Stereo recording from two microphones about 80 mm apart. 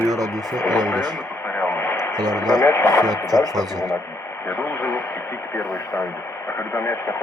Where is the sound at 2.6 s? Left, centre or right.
Left.